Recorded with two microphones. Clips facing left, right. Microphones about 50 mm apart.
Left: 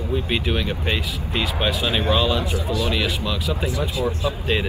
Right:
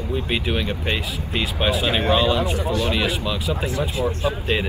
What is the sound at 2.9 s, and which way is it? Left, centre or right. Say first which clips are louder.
Speech: right 1 dB; centre.